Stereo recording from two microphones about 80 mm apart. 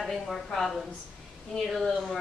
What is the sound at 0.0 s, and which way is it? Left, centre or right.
A woman's voice, centre.